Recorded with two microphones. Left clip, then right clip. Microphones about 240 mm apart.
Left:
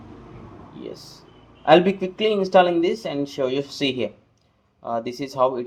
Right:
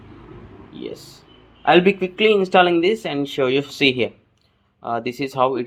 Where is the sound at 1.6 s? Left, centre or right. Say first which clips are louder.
Right 1 dB; right.